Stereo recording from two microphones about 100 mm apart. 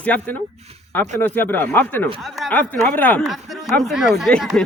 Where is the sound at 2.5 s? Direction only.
15° left (ahead or behind).